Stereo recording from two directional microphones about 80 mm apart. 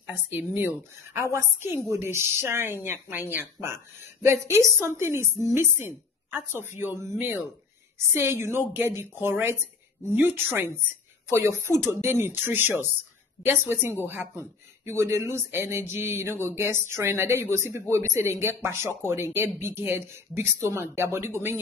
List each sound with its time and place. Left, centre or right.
0.0 s a woman's voice: right